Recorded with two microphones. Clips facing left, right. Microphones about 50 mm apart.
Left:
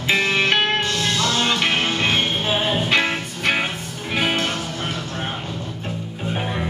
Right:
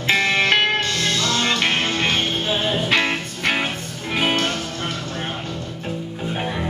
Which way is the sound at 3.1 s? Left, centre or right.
Centre.